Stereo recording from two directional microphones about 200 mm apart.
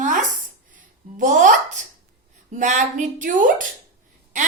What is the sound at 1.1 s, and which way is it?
A woman's voice, 40° right (ahead or behind).